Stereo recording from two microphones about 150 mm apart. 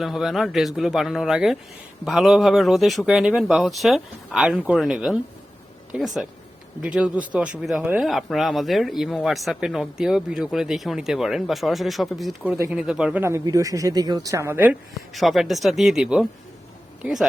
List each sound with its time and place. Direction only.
0.0 s speech: centre (ahead or behind)
12.5 s speech: 20° right (ahead or behind)
12.7 s speech: 5° right (ahead or behind)
13.2 s speech: 20° right (ahead or behind)
15.1 s speech: centre (ahead or behind)